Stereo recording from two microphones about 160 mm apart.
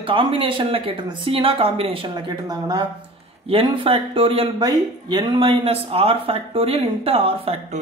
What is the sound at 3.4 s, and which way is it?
Speech, 35° right (ahead or behind).